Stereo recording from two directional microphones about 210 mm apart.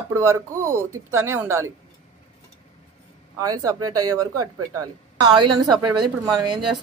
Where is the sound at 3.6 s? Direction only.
15° right (ahead or behind).